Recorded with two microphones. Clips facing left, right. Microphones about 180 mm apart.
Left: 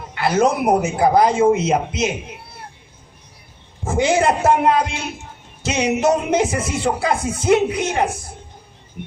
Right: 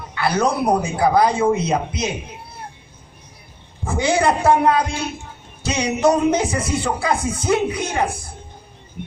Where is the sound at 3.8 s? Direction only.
20° left (ahead or behind).